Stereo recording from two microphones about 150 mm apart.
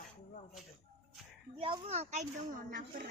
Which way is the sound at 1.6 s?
35° right (ahead or behind).